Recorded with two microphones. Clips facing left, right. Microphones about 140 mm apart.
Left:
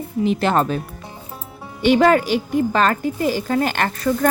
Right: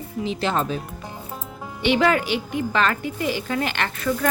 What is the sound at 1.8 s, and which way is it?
Speech, 40° left (ahead or behind).